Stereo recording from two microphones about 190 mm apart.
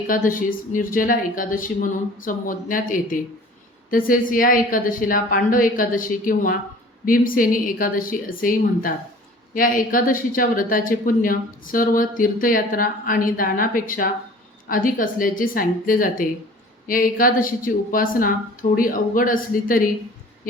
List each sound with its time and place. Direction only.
0.1 s speech: 45° left (ahead or behind)